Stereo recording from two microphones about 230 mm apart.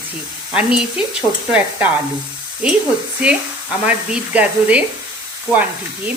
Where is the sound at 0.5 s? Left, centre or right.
Centre.